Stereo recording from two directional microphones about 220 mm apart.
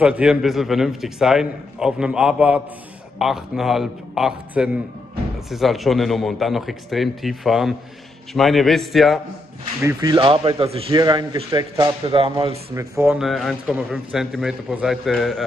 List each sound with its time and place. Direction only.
0.0 s speech: 5° right (ahead or behind)
9.8 s speech: 15° right (ahead or behind)
12.7 s speech: 10° right (ahead or behind)